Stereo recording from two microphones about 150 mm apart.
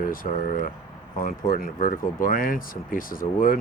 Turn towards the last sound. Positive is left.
turn(degrees=70)  # may be behind; listen again after turning